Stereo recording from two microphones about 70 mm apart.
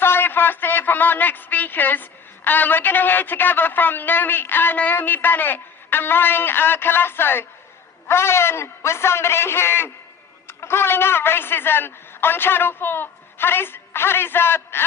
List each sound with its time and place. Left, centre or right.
0.0 s a man's voice: left